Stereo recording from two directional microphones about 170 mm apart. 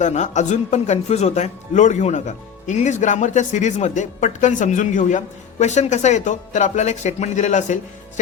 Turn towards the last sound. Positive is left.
turn(degrees=45)  # may be behind; listen again after turning